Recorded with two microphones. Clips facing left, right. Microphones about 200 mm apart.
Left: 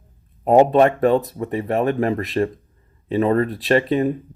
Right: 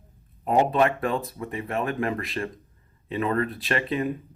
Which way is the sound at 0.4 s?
40° left (ahead or behind).